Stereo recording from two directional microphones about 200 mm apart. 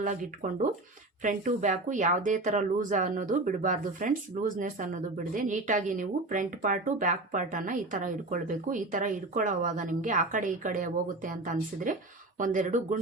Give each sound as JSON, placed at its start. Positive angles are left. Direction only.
{"t": 0.0, "sound": "speech", "side_deg": -40}